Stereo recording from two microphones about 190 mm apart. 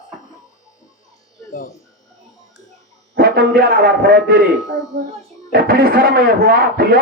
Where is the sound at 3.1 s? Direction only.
50° right (ahead or behind).